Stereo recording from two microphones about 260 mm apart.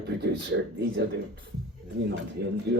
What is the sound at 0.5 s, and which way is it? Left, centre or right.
Speech, right.